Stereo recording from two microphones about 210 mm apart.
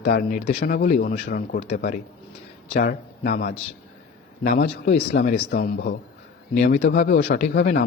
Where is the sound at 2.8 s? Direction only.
50° left (ahead or behind).